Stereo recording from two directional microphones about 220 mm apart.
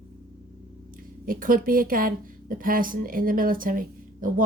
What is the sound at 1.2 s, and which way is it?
A woman's voice, 40° right (ahead or behind).